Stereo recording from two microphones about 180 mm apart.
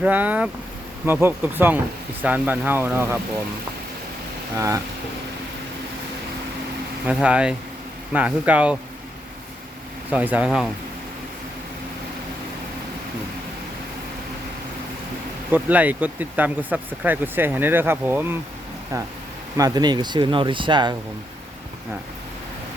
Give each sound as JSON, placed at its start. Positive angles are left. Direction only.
{"t": 0.0, "sound": "speech", "side_deg": -10}
{"t": 4.5, "sound": "speech", "side_deg": -15}
{"t": 7.0, "sound": "speech", "side_deg": -5}
{"t": 10.1, "sound": "speech", "side_deg": -10}
{"t": 15.5, "sound": "speech", "side_deg": -10}
{"t": 19.5, "sound": "speech", "side_deg": -20}